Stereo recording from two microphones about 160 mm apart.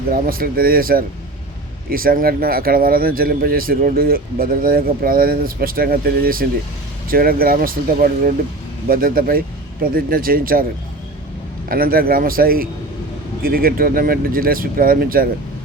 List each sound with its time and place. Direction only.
0.1 s speech: 65° right (ahead or behind)
11.7 s speech: 65° right (ahead or behind)